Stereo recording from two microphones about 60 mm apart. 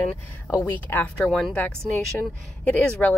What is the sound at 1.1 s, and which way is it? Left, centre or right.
Speech, centre.